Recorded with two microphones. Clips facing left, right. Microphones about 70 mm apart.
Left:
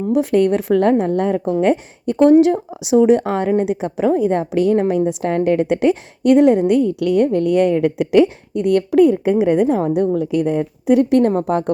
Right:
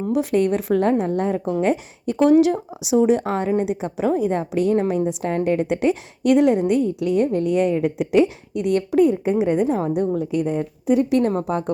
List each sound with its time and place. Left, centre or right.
0.1 s a woman's voice: left
2.9 s a woman's voice: left
6.2 s a woman's voice: left
8.5 s a woman's voice: left
11.4 s a woman's voice: left